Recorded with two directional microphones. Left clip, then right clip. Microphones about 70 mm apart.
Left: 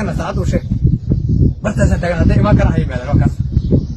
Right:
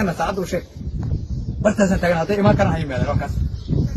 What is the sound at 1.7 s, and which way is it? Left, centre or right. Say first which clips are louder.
Speech: right 1 dB; left.